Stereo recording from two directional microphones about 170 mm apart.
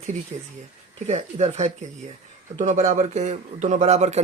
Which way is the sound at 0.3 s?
35° right (ahead or behind).